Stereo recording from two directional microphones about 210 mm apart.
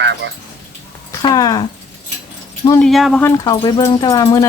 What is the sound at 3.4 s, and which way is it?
Speech, 20° left (ahead or behind).